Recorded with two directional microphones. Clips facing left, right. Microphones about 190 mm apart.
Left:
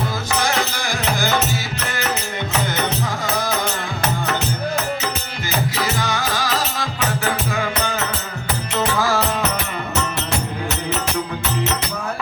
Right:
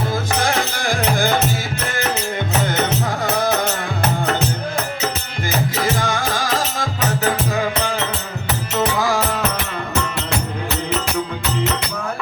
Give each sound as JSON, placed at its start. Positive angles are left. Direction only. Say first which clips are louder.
{"t": 0.3, "sound": "music", "louder": "left 2 dB", "side_deg": -55}
{"t": 5.7, "sound": "music", "louder": "right 2 dB", "side_deg": -50}
{"t": 7.3, "sound": "music", "louder": "right 4 dB", "side_deg": -35}
{"t": 9.0, "sound": "music", "louder": "left 2 dB", "side_deg": -15}